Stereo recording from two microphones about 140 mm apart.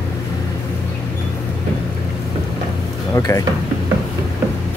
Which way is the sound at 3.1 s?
20° left (ahead or behind).